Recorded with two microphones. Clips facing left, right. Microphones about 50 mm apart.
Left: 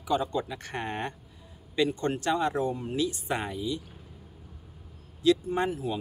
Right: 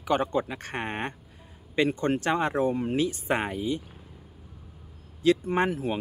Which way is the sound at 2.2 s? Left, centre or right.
Right.